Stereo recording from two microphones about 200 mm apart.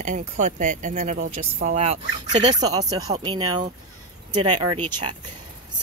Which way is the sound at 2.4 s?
20° right (ahead or behind).